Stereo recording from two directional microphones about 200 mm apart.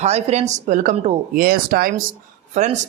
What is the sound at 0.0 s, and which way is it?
A man's voice, 35° right (ahead or behind).